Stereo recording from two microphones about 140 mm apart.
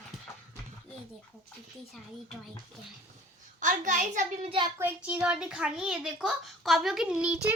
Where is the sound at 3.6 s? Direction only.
65° right (ahead or behind).